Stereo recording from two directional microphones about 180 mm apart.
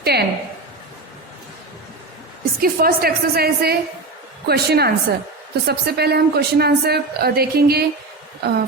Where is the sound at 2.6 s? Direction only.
55° right (ahead or behind).